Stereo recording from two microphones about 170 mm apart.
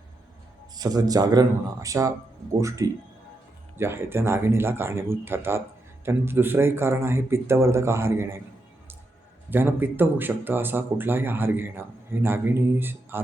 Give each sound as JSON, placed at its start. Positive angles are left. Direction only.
{"t": 0.8, "sound": "speech", "side_deg": -20}
{"t": 9.5, "sound": "speech", "side_deg": -10}